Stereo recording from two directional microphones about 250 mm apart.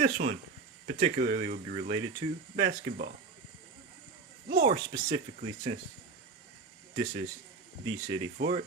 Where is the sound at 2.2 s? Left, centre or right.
Centre.